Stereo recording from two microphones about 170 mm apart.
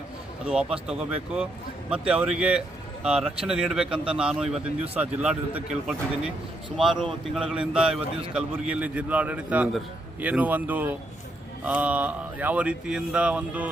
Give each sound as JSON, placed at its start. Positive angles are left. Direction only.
{"t": 0.4, "sound": "a man's voice", "side_deg": -5}
{"t": 3.8, "sound": "speech", "side_deg": -30}
{"t": 4.1, "sound": "a man's voice", "side_deg": -5}